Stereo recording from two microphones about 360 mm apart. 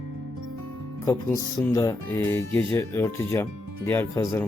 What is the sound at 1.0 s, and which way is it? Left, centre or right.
Speech, centre.